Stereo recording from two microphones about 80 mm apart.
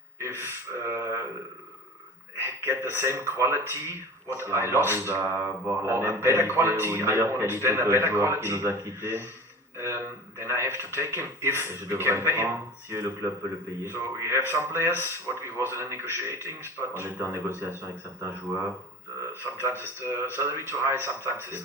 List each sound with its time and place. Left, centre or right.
0.2 s gasp: right
2.4 s speech: right